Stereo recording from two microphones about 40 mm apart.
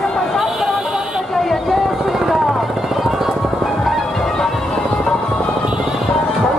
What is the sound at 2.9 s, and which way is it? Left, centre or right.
Music, centre.